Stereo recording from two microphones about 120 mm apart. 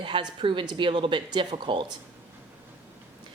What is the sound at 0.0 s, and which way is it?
Speech, 40° right (ahead or behind).